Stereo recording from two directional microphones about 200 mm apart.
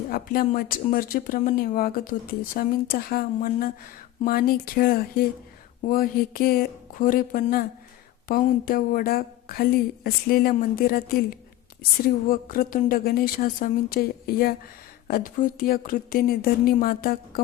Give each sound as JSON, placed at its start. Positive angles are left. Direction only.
{"t": 0.1, "sound": "speech", "side_deg": 45}